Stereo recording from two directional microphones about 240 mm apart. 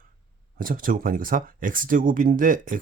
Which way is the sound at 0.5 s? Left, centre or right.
Right.